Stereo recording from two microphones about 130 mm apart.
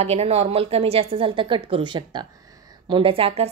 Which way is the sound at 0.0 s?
55° right (ahead or behind).